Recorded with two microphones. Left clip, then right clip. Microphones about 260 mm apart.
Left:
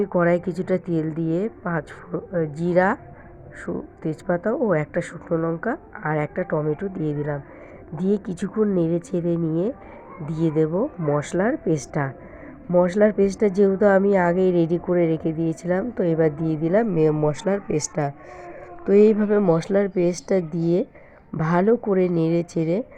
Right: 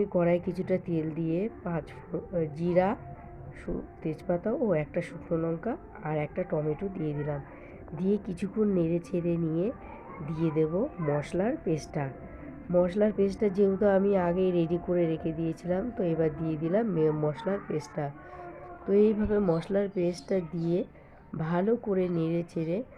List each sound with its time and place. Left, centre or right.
0.0 s a woman's voice: centre